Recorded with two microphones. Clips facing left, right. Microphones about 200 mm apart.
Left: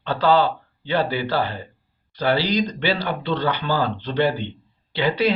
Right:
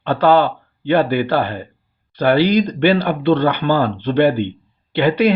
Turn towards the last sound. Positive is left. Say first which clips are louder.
# right 6 dB
turn(degrees=-55)  # may be behind; listen again after turning